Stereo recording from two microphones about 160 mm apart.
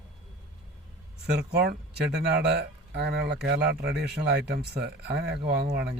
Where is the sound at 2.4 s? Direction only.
90° right.